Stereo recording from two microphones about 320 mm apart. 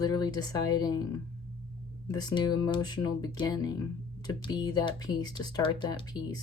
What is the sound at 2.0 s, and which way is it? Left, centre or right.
Speech, centre.